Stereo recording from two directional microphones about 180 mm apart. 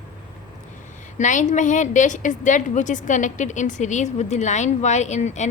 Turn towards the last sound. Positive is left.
turn(degrees=40)  # may be behind; listen again after turning